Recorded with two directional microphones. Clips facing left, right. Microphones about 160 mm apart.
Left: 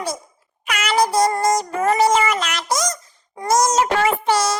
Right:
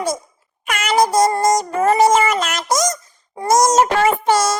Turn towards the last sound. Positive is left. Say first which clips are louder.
# right 3 dB
turn(degrees=-45)  # may be behind; listen again after turning